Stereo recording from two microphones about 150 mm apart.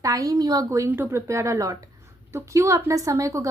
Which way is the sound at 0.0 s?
25° right (ahead or behind).